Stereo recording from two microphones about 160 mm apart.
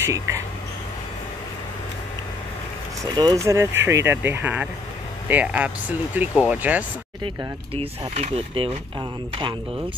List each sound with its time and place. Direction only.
0.0 s speech: 20° right (ahead or behind)
3.0 s speech: 20° right (ahead or behind)
7.7 s speech: 35° right (ahead or behind)